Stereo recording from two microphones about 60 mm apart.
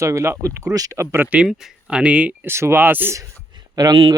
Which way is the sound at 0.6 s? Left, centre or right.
Right.